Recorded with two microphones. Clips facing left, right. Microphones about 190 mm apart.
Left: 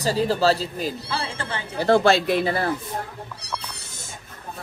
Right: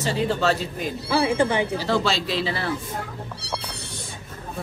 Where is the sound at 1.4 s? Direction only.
15° right (ahead or behind).